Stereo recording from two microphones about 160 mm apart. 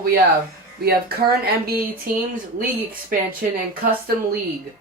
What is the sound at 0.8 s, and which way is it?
Speech, 75° right (ahead or behind).